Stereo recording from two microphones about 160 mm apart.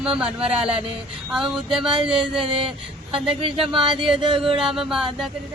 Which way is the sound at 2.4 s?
35° right (ahead or behind).